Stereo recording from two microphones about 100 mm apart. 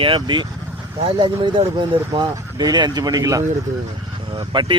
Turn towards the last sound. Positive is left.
turn(degrees=-55)  # may be behind; listen again after turning